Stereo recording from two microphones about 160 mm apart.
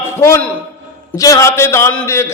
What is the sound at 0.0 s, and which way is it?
A man's voice, 15° left (ahead or behind).